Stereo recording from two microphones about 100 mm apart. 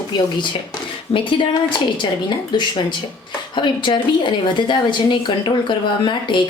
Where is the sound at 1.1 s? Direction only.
90° left.